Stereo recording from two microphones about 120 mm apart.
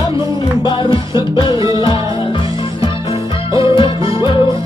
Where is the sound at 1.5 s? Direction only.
30° right (ahead or behind).